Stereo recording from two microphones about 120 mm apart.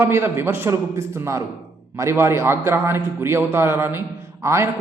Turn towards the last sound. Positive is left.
turn(degrees=-25)  # may be behind; listen again after turning